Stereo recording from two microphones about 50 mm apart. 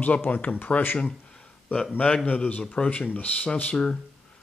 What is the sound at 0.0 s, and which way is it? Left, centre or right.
Speech, left.